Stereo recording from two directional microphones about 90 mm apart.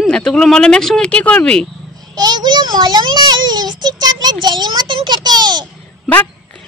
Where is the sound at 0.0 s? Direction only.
5° left (ahead or behind).